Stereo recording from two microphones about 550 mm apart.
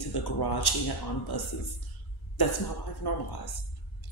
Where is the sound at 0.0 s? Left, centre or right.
Left.